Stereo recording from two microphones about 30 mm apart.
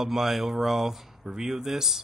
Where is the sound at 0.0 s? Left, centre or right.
Centre.